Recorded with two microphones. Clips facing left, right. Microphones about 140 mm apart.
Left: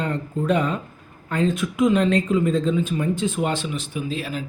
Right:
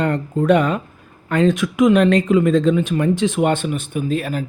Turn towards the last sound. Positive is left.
turn(degrees=-55)  # may be behind; listen again after turning